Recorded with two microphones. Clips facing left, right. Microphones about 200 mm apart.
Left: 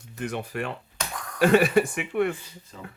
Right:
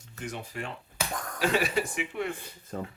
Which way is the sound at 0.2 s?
65° left (ahead or behind).